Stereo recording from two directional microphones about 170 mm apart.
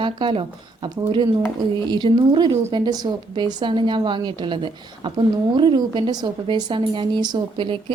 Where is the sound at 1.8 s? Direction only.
25° right (ahead or behind).